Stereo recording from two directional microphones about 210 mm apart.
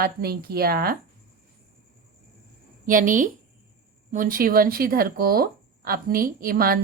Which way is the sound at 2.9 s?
40° right (ahead or behind).